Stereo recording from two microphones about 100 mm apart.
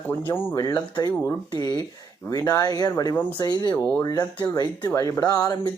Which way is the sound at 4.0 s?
40° left (ahead or behind).